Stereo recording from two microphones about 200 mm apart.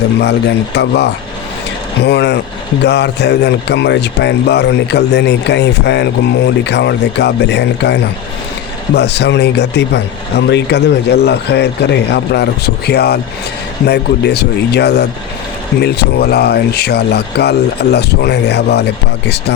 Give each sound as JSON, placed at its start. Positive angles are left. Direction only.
{"t": 0.2, "sound": "speech", "side_deg": 60}